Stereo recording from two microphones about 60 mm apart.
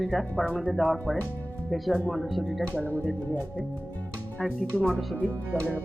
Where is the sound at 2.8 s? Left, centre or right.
Left.